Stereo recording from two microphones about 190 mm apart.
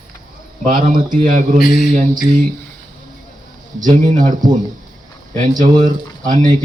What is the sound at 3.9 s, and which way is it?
A man's voice, 40° right (ahead or behind).